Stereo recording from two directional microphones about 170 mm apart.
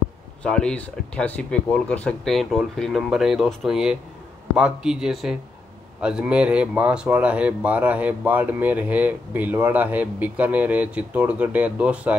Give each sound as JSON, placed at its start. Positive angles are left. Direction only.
{"t": 0.4, "sound": "speech", "side_deg": 5}